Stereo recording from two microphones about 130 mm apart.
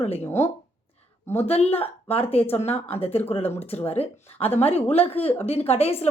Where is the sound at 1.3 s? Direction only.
50° left (ahead or behind).